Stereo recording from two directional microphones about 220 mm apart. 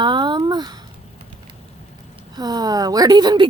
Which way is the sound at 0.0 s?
20° right (ahead or behind).